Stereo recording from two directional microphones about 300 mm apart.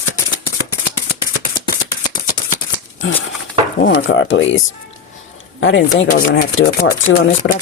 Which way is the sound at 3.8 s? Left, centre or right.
Left.